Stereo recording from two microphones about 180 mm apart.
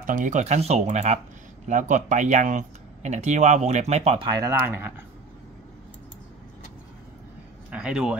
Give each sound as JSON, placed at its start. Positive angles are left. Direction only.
{"t": 0.0, "sound": "speech", "side_deg": -45}
{"t": 7.7, "sound": "speech", "side_deg": -5}